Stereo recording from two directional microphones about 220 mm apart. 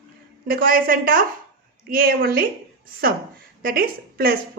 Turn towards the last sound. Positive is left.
turn(degrees=-40)  # may be behind; listen again after turning